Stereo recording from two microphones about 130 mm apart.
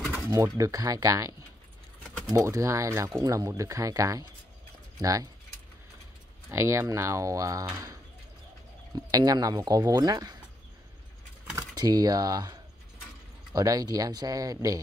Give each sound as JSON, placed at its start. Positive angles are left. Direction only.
{"t": 0.3, "sound": "speech", "side_deg": -25}
{"t": 6.5, "sound": "speech", "side_deg": -20}
{"t": 11.5, "sound": "speech", "side_deg": -30}